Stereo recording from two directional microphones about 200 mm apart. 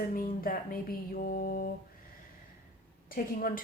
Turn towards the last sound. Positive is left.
turn(degrees=45)  # may be behind; listen again after turning